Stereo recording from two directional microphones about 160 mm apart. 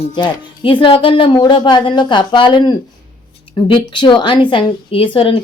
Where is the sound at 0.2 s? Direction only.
30° left (ahead or behind).